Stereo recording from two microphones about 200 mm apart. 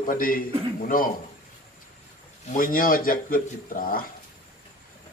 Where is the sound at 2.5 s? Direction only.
45° left (ahead or behind).